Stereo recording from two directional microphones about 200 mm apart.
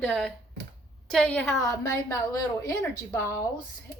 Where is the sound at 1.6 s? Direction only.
15° left (ahead or behind).